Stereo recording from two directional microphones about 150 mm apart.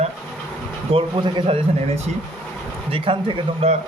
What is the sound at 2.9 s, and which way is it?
Speech, 35° right (ahead or behind).